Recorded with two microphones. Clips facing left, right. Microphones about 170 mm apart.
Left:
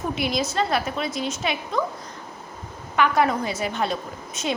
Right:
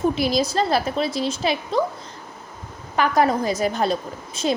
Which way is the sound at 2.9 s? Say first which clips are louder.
Right 2 dB; 35° right (ahead or behind).